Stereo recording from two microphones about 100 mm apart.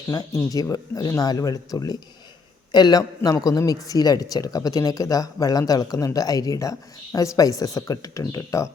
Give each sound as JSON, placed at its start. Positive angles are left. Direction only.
{"t": 0.1, "sound": "a man's voice", "side_deg": 40}